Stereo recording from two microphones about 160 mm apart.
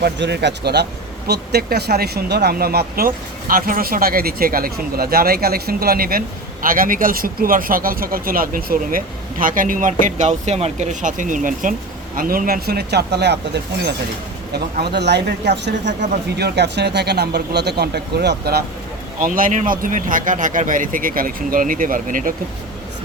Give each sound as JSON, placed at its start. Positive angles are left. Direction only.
{"t": 0.0, "sound": "speech", "side_deg": -90}
{"t": 19.2, "sound": "speech", "side_deg": -55}